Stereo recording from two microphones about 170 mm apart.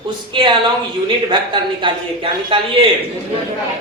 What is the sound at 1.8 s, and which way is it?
Speech, 30° right (ahead or behind).